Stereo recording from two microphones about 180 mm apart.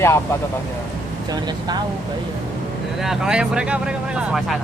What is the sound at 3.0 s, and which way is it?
Speech, 5° right (ahead or behind).